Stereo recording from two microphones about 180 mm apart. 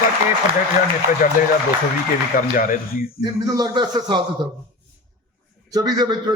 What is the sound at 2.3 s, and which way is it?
Speech, 50° left (ahead or behind).